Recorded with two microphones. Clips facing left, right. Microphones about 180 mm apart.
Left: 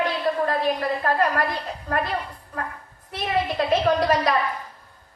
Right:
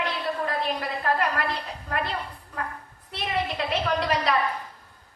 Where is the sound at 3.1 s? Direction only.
45° left (ahead or behind).